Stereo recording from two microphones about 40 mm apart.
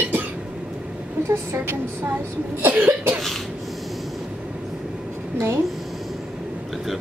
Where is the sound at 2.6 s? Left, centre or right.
Right.